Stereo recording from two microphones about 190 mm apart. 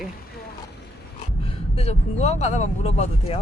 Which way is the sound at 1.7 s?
35° left (ahead or behind).